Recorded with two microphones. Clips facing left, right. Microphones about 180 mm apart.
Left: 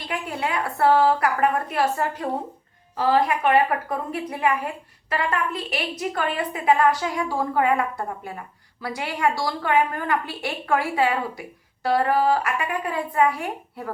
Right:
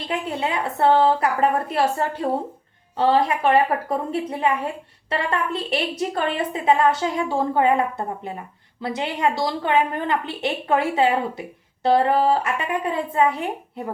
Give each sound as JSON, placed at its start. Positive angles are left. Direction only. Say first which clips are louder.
{"t": 0.0, "sound": "a woman's voice", "louder": "right 3 dB", "side_deg": -25}